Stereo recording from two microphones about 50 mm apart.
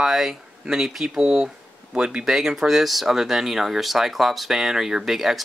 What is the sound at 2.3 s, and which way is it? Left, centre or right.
Speech, centre.